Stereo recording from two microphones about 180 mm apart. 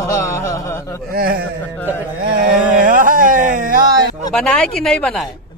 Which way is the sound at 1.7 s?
10° left (ahead or behind).